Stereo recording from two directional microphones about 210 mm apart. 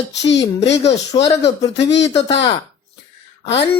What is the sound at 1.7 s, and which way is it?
Speech, 55° left (ahead or behind).